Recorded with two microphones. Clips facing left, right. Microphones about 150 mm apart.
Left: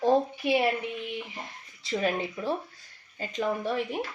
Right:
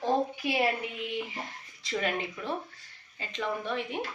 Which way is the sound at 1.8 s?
30° left (ahead or behind).